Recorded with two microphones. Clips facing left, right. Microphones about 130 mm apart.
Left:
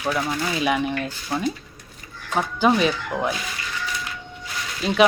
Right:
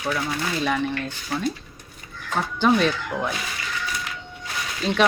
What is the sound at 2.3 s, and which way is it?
Speech, 5° left (ahead or behind).